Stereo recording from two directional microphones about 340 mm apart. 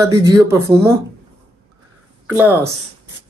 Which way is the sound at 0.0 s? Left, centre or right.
Centre.